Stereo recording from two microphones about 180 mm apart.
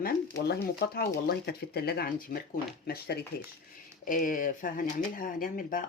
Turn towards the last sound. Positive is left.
turn(degrees=50)  # may be behind; listen again after turning